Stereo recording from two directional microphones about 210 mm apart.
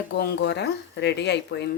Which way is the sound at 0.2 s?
50° left (ahead or behind).